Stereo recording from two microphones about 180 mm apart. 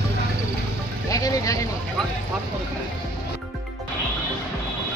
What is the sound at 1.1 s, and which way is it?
Music, 20° left (ahead or behind).